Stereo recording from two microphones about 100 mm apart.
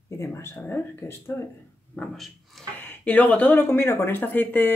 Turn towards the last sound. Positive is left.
turn(degrees=20)  # may be behind; listen again after turning